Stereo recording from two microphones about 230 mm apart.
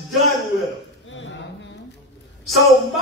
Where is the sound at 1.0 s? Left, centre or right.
Left.